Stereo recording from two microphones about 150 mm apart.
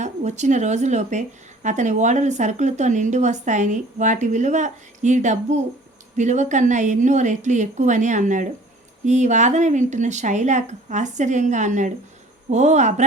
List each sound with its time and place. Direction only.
0.0 s a woman's voice: 50° right (ahead or behind)